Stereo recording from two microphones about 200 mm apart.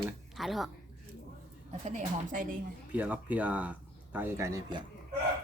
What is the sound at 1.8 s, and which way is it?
Speech, 40° right (ahead or behind).